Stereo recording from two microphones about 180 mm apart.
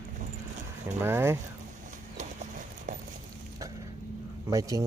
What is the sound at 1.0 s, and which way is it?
Speech, 15° right (ahead or behind).